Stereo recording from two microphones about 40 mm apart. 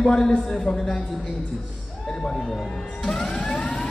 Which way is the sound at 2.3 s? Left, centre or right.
Centre.